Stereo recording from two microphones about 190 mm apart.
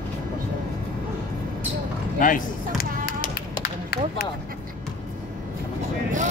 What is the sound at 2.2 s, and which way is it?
Speech, 45° left (ahead or behind).